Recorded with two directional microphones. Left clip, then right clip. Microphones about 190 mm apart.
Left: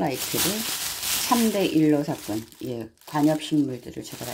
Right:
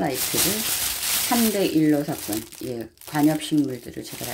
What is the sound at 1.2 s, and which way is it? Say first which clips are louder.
Speech: even; 10° left (ahead or behind).